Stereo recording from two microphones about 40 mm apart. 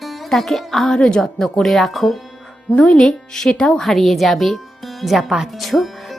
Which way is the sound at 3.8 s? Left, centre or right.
Centre.